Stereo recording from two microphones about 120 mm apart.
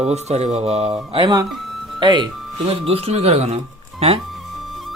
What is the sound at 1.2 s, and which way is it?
Speech, 35° right (ahead or behind).